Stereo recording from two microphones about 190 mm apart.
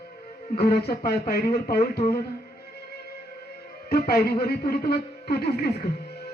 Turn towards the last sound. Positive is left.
turn(degrees=55)  # may be behind; listen again after turning